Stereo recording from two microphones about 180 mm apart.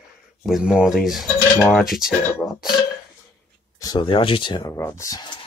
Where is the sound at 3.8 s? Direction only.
25° left (ahead or behind).